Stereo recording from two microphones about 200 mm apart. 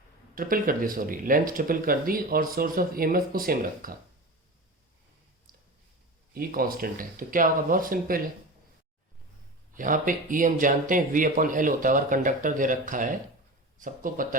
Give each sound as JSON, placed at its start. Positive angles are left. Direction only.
{"t": 0.3, "sound": "speech", "side_deg": -45}
{"t": 5.5, "sound": "a sound", "side_deg": -45}
{"t": 6.3, "sound": "speech", "side_deg": -45}
{"t": 9.7, "sound": "speech", "side_deg": -40}